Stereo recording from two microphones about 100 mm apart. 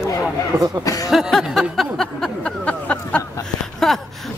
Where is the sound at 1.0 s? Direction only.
Centre (ahead or behind).